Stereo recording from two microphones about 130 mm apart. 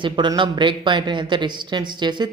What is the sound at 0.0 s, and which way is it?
Speech, 35° right (ahead or behind).